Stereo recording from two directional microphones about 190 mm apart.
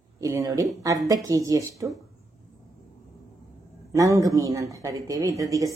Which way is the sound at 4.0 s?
15° right (ahead or behind).